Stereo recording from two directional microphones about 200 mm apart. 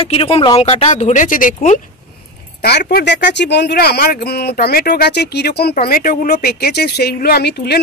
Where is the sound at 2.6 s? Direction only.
55° left (ahead or behind).